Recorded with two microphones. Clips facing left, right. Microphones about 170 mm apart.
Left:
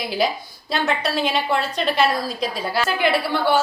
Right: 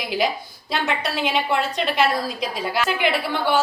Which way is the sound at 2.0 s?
10° right (ahead or behind).